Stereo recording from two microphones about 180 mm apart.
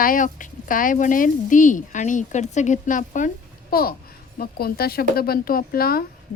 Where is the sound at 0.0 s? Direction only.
50° left (ahead or behind).